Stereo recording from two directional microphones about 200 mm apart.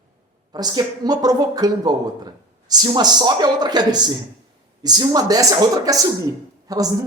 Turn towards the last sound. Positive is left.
turn(degrees=-20)  # may be behind; listen again after turning